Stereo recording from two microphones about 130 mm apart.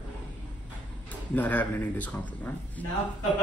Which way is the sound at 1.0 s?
10° left (ahead or behind).